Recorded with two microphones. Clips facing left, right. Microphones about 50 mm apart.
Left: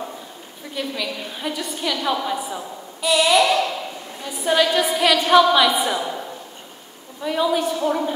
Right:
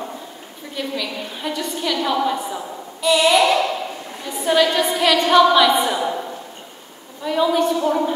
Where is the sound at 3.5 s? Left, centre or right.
Centre.